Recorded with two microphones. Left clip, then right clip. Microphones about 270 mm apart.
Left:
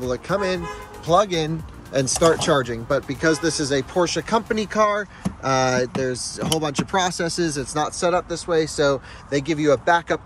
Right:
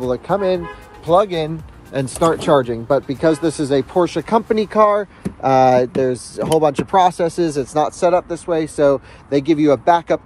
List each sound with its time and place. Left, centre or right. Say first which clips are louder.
0.1 s speech: right 5 dB; centre